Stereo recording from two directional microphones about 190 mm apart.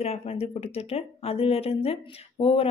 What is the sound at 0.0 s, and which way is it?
Speech, 30° left (ahead or behind).